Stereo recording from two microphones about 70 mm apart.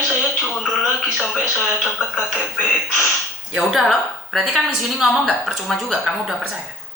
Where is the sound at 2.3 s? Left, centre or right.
Left.